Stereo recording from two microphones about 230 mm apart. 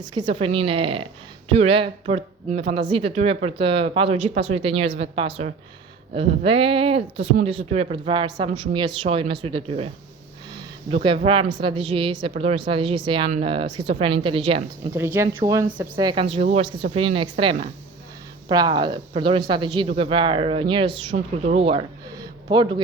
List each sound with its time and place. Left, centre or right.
0.0 s speech: centre
10.9 s speech: right
14.9 s a woman's voice: centre